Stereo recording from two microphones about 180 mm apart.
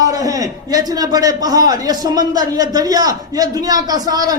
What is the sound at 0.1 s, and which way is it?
A man's voice, 20° right (ahead or behind).